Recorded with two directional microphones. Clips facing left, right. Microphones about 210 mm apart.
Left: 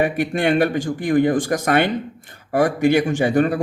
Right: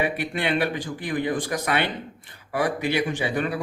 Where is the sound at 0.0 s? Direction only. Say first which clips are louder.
Left 7 dB; 45° left (ahead or behind).